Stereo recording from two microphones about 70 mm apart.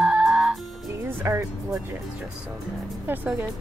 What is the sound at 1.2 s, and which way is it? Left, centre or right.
Speech, right.